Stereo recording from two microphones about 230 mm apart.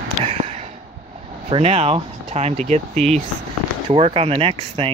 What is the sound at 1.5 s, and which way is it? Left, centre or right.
Speech, right.